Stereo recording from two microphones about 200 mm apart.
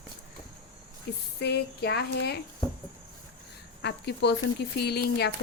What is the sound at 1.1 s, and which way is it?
Speech, 55° left (ahead or behind).